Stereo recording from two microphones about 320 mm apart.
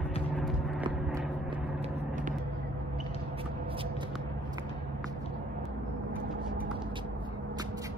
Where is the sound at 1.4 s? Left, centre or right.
Centre.